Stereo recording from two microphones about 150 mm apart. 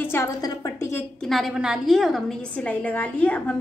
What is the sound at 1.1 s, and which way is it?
A woman's voice, centre (ahead or behind).